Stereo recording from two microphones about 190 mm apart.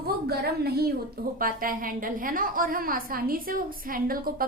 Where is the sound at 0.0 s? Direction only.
55° right (ahead or behind).